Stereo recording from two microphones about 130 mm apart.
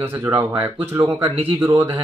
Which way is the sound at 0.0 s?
15° right (ahead or behind).